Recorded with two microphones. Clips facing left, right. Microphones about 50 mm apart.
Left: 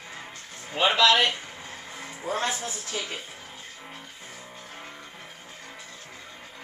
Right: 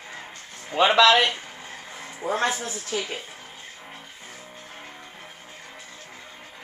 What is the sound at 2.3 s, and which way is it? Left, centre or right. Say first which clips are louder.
Speech: right 4 dB; right.